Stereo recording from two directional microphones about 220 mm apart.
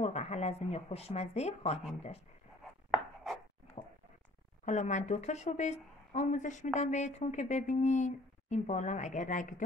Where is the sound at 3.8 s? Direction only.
25° left (ahead or behind).